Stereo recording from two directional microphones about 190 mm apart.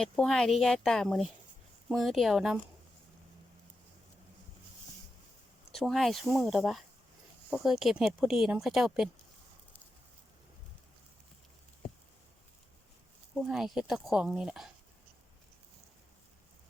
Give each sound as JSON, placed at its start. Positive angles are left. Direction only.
{"t": 0.0, "sound": "speech", "side_deg": 5}
{"t": 5.7, "sound": "speech", "side_deg": 0}
{"t": 13.3, "sound": "speech", "side_deg": 0}